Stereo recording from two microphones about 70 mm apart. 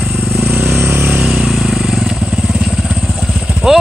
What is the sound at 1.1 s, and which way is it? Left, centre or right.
Vehicle, centre.